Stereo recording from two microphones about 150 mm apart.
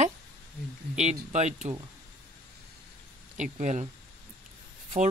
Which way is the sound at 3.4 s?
55° right (ahead or behind).